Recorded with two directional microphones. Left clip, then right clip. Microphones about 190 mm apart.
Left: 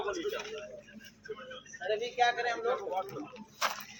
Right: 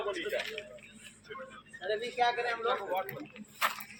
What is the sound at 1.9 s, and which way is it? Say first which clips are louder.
Speech: left 1 dB; 55° right (ahead or behind).